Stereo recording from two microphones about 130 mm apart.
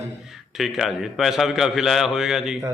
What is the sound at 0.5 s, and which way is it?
A man's voice, centre (ahead or behind).